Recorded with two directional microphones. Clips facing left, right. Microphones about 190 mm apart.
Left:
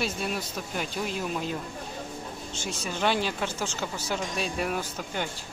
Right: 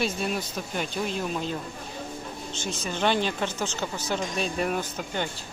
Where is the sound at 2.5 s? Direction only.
10° left (ahead or behind).